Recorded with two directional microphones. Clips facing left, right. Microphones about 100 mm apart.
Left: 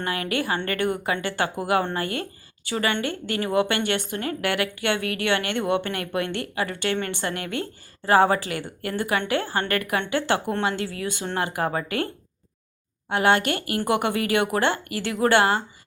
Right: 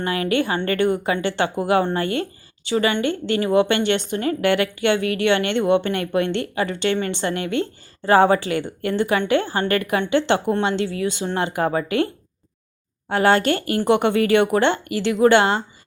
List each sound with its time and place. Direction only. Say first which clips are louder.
0.0 s a woman's voice: right 5 dB; 25° right (ahead or behind)
13.1 s a woman's voice: right 4 dB; 35° right (ahead or behind)